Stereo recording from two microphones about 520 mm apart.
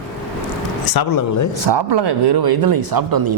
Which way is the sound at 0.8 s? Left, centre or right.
Left.